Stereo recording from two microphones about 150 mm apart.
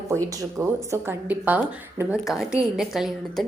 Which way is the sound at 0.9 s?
15° right (ahead or behind).